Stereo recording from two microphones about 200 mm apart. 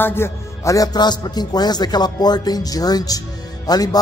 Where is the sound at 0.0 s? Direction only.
10° left (ahead or behind).